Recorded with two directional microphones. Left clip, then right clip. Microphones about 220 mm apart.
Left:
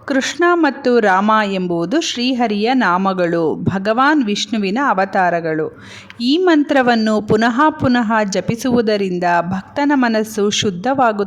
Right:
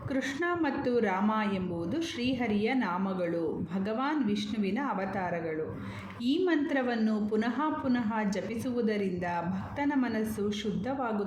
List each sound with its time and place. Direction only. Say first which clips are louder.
0.1 s speech: left 17 dB; 40° left (ahead or behind)